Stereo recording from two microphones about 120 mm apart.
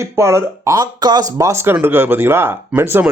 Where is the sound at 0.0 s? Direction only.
20° right (ahead or behind).